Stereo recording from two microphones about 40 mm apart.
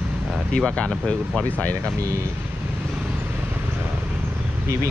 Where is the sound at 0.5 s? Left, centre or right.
Left.